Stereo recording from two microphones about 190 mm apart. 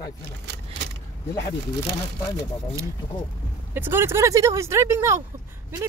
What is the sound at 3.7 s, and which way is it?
Speech, 10° right (ahead or behind).